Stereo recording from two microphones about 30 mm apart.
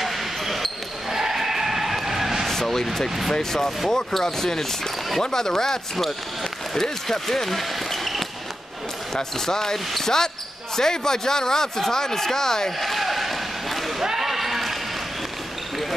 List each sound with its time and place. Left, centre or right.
0.0 s basketball bounce: centre
1.1 s a sound: centre
2.5 s vehicle: centre
3.3 s speech: centre
9.1 s speech: centre
12.8 s basketball bounce: centre
14.2 s a sound: centre